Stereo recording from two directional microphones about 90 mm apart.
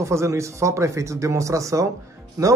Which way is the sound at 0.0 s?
35° right (ahead or behind).